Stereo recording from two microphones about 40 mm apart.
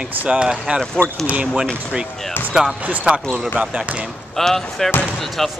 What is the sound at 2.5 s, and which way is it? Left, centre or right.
Speech, centre.